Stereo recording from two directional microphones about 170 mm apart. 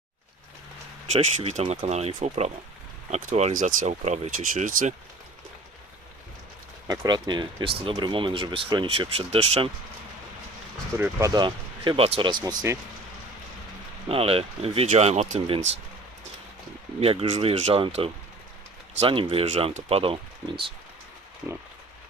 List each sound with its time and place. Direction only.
1.0 s speech: 40° right (ahead or behind)
6.8 s speech: 20° right (ahead or behind); by 9.6 s 35° right (ahead or behind)
10.9 s speech: 10° right (ahead or behind)
11.3 s speech: 30° right (ahead or behind)
14.1 s speech: 35° right (ahead or behind)
17.0 s speech: 35° right (ahead or behind)